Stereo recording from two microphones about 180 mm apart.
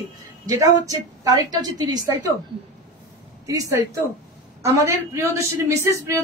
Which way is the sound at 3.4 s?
20° right (ahead or behind).